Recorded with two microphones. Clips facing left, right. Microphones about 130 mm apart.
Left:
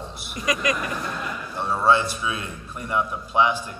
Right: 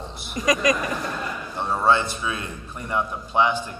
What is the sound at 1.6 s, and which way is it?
A man's voice, 20° right (ahead or behind).